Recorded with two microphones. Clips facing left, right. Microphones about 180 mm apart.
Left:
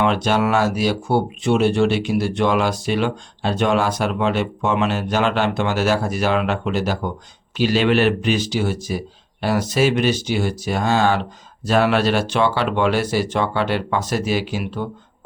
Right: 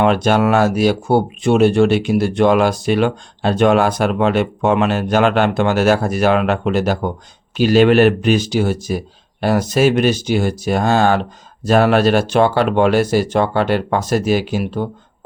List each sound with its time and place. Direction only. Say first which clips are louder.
0.0 s speech: right 4 dB; 50° right (ahead or behind)